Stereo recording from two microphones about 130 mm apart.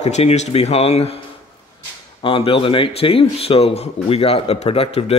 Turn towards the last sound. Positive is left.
turn(degrees=50)  # may be behind; listen again after turning